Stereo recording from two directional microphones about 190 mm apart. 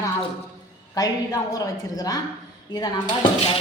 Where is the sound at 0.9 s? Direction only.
20° left (ahead or behind).